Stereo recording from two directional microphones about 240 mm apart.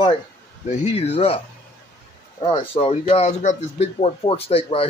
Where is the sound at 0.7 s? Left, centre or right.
Left.